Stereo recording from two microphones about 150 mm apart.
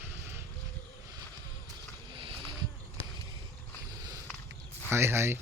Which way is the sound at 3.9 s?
25° right (ahead or behind).